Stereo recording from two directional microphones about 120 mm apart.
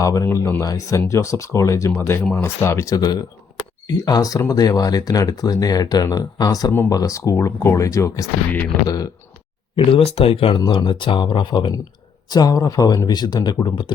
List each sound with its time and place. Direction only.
0.0 s speech: 30° left (ahead or behind)
9.7 s speech: 50° left (ahead or behind)